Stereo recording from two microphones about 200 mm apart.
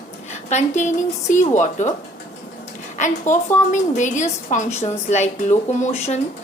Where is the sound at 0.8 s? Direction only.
40° left (ahead or behind).